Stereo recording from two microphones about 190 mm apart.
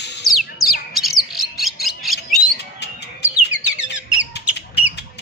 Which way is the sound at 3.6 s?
5° right (ahead or behind).